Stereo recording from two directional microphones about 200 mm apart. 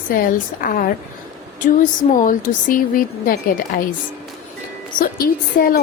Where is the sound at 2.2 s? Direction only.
40° left (ahead or behind).